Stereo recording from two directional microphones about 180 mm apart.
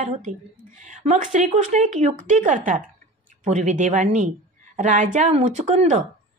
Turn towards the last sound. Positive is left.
turn(degrees=-40)  # may be behind; listen again after turning